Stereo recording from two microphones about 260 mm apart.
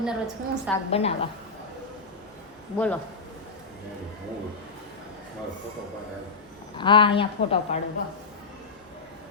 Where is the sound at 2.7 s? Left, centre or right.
Centre.